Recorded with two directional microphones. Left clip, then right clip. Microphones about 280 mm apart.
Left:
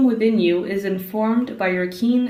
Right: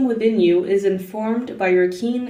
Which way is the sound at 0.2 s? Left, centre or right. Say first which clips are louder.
Right 2 dB; left.